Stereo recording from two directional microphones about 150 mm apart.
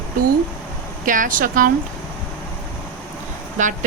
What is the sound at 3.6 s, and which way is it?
Speech, 55° right (ahead or behind).